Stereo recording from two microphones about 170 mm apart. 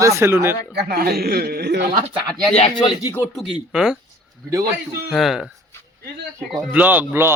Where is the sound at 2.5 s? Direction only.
40° left (ahead or behind).